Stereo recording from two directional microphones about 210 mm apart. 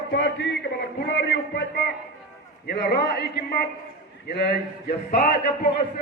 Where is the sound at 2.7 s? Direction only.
50° left (ahead or behind).